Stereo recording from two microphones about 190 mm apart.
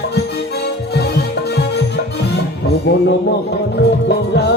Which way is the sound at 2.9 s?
65° left (ahead or behind).